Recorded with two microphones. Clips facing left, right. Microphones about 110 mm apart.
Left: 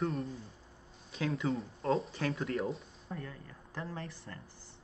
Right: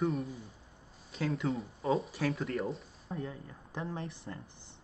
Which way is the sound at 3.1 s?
20° right (ahead or behind).